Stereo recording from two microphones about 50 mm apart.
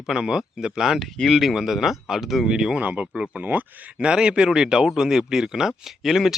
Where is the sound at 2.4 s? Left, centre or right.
Centre.